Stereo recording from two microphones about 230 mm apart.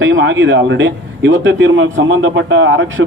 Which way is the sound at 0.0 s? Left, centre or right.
Right.